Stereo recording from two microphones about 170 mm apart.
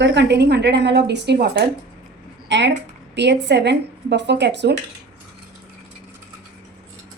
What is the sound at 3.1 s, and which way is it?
Speech, 85° right.